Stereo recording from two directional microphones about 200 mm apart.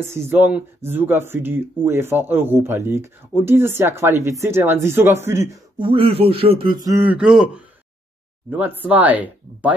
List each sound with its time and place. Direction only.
0.1 s speech: 10° right (ahead or behind)
5.9 s a man's voice: 25° right (ahead or behind); by 9.8 s 10° right (ahead or behind)